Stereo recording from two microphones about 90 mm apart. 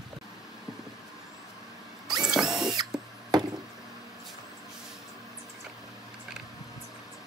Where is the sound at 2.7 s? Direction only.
50° right (ahead or behind).